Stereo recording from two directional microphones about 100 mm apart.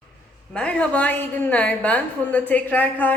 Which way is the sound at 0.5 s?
10° left (ahead or behind).